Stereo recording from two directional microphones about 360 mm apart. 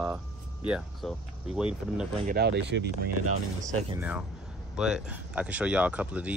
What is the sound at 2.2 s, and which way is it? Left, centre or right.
Speech, right.